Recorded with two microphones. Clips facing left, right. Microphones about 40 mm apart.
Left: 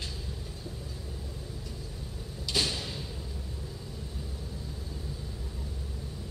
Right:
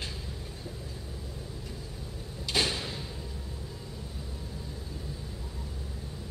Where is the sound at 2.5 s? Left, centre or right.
Centre.